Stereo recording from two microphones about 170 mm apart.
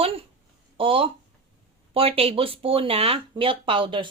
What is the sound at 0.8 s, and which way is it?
Speech, 30° right (ahead or behind).